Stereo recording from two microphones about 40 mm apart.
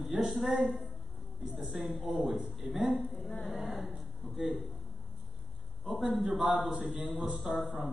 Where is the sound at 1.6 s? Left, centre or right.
Centre.